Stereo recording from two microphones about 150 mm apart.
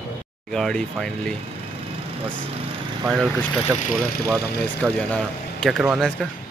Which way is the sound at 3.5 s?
5° left (ahead or behind).